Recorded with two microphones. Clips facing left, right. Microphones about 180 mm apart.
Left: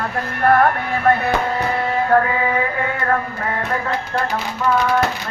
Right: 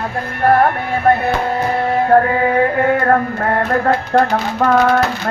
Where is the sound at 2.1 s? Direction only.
45° right (ahead or behind).